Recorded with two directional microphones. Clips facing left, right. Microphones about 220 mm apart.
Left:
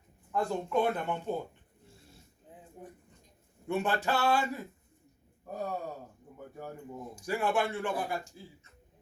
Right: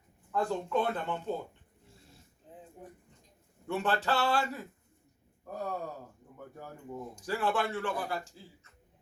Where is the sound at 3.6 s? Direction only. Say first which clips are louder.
Left 1 dB; 15° left (ahead or behind).